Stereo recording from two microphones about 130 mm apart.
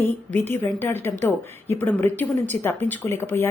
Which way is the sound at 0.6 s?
15° left (ahead or behind).